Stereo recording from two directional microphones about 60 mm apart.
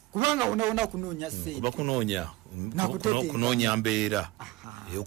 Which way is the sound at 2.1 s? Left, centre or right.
Centre.